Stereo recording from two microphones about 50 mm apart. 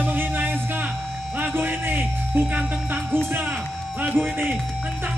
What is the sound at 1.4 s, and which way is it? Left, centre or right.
Speech, right.